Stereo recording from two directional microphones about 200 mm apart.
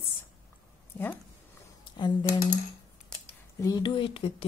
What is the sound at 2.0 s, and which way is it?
Speech, 20° left (ahead or behind).